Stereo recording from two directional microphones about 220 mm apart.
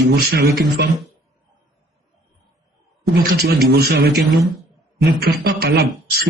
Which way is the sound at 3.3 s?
45° right (ahead or behind).